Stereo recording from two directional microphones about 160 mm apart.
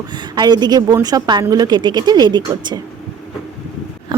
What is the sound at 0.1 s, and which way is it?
A woman's voice, 25° right (ahead or behind).